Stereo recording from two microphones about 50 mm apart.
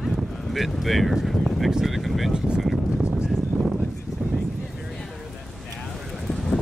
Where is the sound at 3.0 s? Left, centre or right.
Centre.